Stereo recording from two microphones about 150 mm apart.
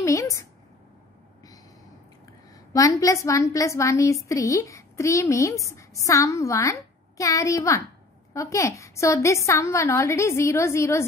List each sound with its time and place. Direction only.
0.0 s a woman's voice: 20° left (ahead or behind)
2.7 s a woman's voice: 20° left (ahead or behind)